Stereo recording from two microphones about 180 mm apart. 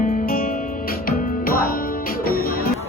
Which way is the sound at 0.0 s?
50° left (ahead or behind).